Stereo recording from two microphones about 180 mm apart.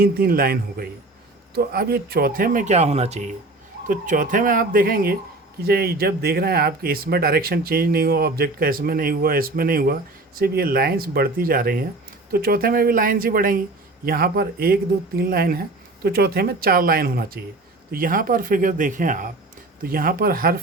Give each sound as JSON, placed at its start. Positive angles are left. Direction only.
{"t": 0.0, "sound": "speech", "side_deg": -55}